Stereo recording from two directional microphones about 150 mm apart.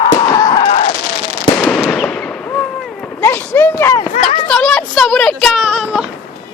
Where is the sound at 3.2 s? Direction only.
15° left (ahead or behind).